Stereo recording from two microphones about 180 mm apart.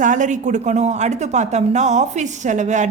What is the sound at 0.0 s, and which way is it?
A woman's voice, 45° right (ahead or behind).